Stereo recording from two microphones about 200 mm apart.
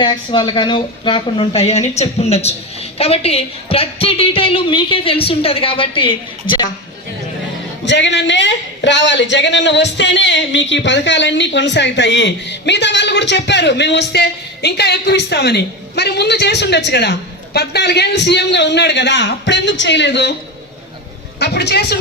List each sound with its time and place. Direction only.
0.0 s a woman's voice: 25° left (ahead or behind)
7.9 s speech: 65° left (ahead or behind)
21.3 s speech: 55° left (ahead or behind)